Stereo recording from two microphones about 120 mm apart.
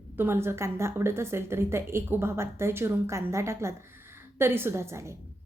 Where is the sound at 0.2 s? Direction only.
20° right (ahead or behind).